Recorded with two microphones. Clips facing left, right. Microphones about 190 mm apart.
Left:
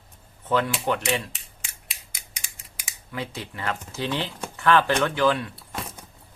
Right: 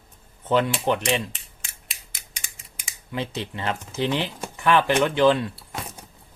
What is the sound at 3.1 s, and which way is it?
Speech, 25° right (ahead or behind).